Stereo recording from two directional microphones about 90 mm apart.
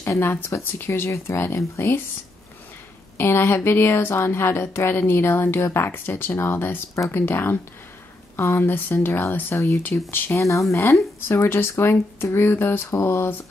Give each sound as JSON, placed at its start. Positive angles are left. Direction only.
{"t": 0.0, "sound": "speech", "side_deg": 25}
{"t": 3.2, "sound": "speech", "side_deg": 25}
{"t": 10.4, "sound": "speech", "side_deg": 35}